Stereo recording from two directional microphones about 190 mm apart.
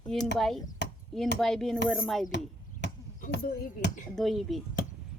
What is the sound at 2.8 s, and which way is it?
Chop, 65° left (ahead or behind).